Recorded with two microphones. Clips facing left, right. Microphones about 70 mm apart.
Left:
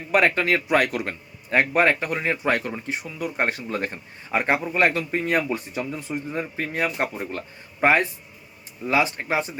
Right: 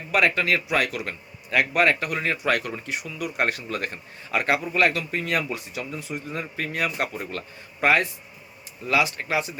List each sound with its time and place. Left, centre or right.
0.1 s a man's voice: left